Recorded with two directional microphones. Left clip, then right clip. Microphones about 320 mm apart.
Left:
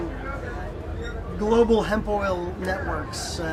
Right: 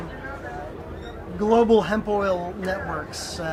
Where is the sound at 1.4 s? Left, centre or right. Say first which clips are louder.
Right 2 dB; right.